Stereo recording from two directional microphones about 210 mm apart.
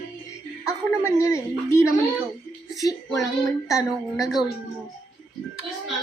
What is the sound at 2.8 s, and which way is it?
Child singing, 15° left (ahead or behind).